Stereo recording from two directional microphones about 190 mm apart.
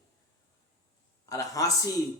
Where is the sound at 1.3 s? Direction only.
15° left (ahead or behind).